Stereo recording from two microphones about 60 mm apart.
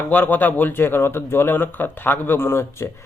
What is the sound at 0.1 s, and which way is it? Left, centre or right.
Speech, left.